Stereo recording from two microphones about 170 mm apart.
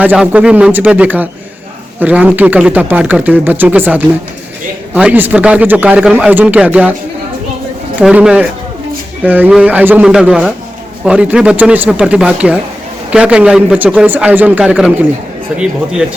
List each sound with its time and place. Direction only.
0.0 s speech: 10° right (ahead or behind)
8.0 s speech: 5° right (ahead or behind)